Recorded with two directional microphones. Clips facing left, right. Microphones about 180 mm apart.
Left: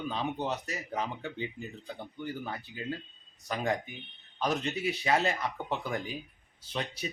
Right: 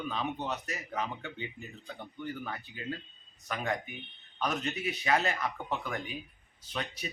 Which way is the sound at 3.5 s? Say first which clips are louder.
Left 3 dB; 35° left (ahead or behind).